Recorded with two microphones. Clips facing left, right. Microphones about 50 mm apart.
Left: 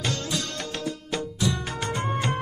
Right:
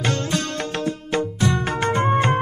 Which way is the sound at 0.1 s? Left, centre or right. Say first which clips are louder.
Right 6 dB; right.